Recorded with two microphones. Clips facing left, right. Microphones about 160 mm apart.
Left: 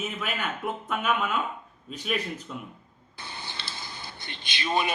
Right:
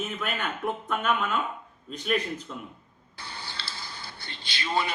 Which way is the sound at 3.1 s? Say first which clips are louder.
Even; 20° left (ahead or behind).